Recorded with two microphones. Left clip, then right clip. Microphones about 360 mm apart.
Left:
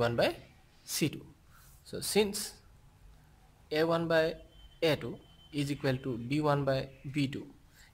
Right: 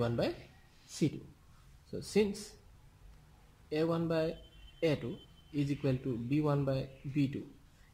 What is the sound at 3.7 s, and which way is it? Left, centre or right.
Speech, left.